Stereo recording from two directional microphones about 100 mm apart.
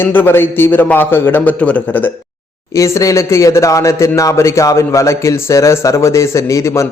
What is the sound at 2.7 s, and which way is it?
Speech, 30° left (ahead or behind).